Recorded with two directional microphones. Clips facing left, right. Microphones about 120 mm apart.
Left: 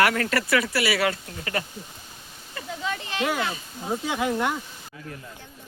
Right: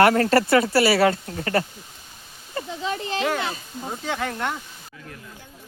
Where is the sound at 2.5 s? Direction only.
35° right (ahead or behind).